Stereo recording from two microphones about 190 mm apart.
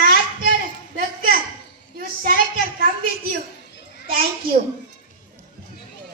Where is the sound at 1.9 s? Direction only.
50° right (ahead or behind).